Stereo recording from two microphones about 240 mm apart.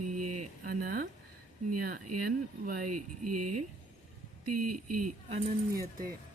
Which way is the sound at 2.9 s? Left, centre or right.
Right.